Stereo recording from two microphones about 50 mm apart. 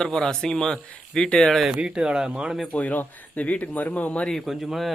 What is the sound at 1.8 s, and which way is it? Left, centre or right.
Speech, centre.